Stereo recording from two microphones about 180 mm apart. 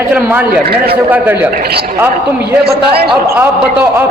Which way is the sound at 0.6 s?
60° right (ahead or behind).